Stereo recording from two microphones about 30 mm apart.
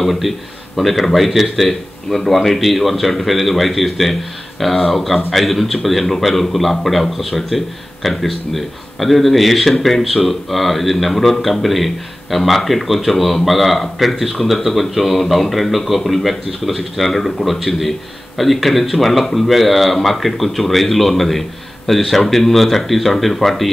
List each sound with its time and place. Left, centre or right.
0.0 s a man's voice: centre